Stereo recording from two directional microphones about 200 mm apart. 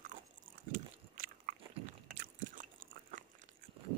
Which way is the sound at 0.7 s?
40° right (ahead or behind).